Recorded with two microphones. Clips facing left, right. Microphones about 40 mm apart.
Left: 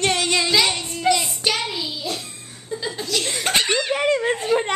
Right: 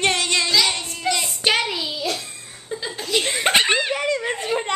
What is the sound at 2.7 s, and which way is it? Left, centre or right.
Chuckle, centre.